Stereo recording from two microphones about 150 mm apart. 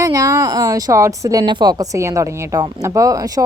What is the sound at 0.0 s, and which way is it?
Speech, 20° right (ahead or behind).